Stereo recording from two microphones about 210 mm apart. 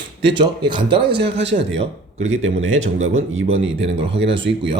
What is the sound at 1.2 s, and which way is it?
A man's voice, 55° right (ahead or behind).